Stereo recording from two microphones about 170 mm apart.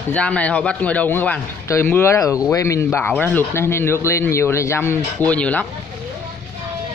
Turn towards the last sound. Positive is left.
turn(degrees=10)  # may be behind; listen again after turning